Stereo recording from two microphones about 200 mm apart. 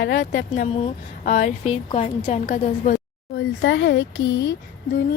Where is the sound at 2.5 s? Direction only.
45° left (ahead or behind).